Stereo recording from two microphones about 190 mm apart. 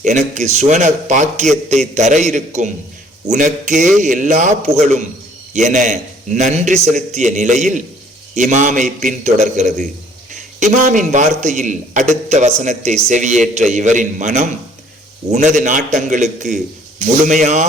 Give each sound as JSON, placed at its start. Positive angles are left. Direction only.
{"t": 0.0, "sound": "a man's voice", "side_deg": -40}